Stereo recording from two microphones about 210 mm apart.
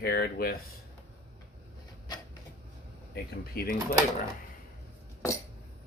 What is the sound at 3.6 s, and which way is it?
Speech, 45° left (ahead or behind).